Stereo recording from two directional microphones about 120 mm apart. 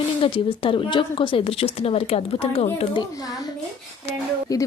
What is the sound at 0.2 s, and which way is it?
A woman's voice, 50° left (ahead or behind).